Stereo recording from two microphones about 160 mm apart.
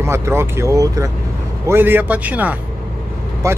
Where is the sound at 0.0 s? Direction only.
15° right (ahead or behind).